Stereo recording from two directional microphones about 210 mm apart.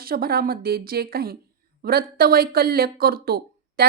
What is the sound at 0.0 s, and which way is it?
Speech, 45° right (ahead or behind).